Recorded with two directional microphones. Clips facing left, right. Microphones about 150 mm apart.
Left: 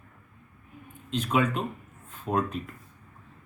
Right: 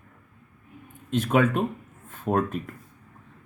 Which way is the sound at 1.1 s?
50° right (ahead or behind).